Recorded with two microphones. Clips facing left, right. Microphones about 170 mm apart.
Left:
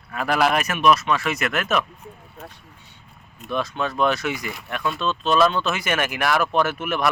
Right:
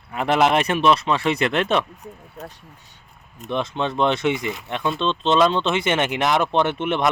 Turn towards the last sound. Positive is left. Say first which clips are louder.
# right 2 dB
turn(degrees=-25)  # may be behind; listen again after turning